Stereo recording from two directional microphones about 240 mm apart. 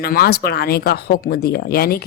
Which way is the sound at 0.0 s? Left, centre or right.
Left.